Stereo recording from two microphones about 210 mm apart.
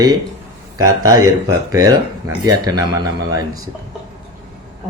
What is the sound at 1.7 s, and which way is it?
Speech, 15° right (ahead or behind).